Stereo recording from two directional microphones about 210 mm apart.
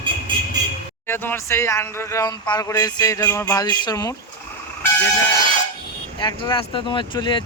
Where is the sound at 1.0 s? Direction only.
10° left (ahead or behind).